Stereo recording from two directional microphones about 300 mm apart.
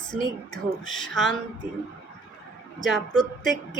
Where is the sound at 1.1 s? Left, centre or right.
Centre.